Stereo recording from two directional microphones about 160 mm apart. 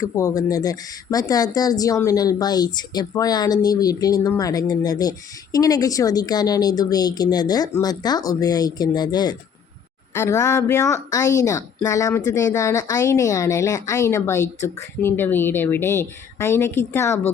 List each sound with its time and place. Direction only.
0.0 s speech: 20° left (ahead or behind)